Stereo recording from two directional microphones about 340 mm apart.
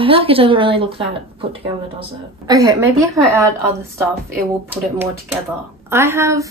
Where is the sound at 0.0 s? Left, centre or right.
Centre.